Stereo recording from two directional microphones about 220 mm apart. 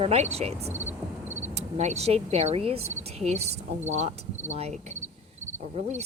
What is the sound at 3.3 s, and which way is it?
Speech, 30° right (ahead or behind).